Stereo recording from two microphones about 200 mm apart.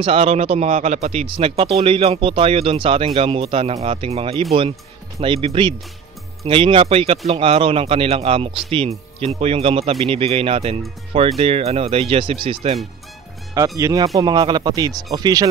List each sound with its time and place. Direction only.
0.0 s speech: 30° right (ahead or behind)
13.7 s speech: 15° right (ahead or behind)